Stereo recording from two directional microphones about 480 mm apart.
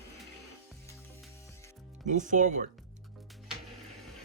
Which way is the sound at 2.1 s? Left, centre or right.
Centre.